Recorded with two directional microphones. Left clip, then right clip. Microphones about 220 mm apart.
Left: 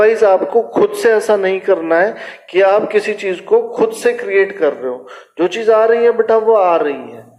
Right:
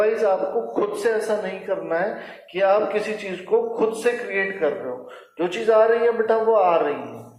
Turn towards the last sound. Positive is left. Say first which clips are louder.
# left 6 dB
turn(degrees=45)  # may be behind; listen again after turning